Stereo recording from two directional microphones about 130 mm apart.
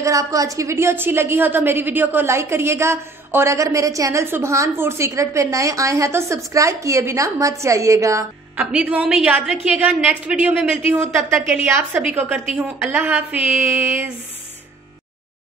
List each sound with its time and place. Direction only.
0.0 s a woman's voice: 25° right (ahead or behind)
8.5 s a woman's voice: 10° right (ahead or behind)